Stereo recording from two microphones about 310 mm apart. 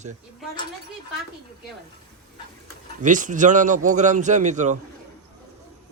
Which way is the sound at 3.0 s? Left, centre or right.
Right.